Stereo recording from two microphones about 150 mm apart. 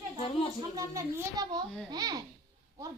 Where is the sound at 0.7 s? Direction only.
20° right (ahead or behind).